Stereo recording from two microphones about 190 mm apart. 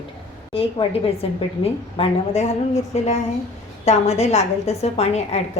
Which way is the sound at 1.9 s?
30° left (ahead or behind).